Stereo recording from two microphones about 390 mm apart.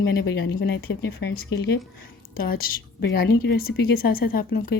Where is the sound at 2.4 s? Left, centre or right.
Left.